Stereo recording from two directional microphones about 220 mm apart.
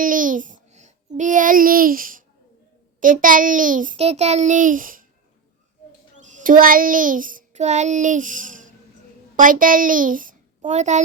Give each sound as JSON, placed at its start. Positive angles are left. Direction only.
{"t": 0.0, "sound": "babbling", "side_deg": -35}
{"t": 3.0, "sound": "a child's voice", "side_deg": -40}
{"t": 6.2, "sound": "child singing", "side_deg": -35}
{"t": 9.3, "sound": "a child's voice", "side_deg": -40}